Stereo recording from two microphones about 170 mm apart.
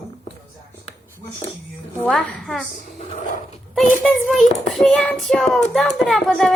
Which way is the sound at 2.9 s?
40° left (ahead or behind).